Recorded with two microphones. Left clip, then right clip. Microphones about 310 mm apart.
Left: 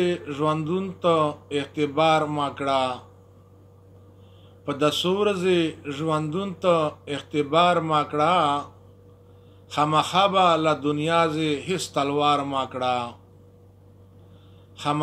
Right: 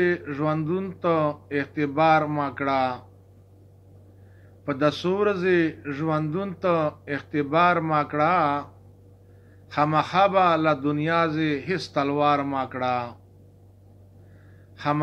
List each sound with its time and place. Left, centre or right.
0.0 s a man's voice: left
4.6 s a man's voice: left
9.7 s a man's voice: left